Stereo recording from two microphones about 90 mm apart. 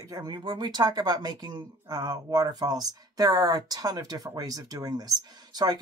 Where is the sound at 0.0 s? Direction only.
45° right (ahead or behind).